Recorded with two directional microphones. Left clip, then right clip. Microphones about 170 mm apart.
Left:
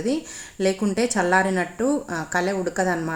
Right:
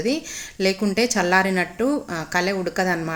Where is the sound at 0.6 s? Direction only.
15° right (ahead or behind).